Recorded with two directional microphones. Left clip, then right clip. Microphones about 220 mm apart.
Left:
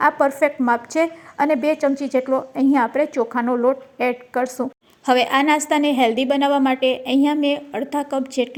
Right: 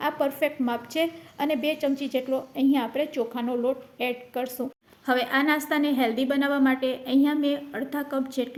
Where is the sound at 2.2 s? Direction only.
15° left (ahead or behind).